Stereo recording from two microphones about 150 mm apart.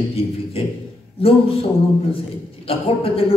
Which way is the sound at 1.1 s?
40° left (ahead or behind).